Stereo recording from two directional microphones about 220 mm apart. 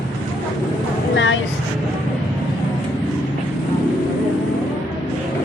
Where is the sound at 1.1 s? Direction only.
60° left (ahead or behind).